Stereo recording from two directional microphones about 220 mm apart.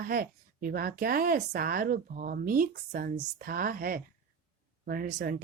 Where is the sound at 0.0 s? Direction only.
40° right (ahead or behind).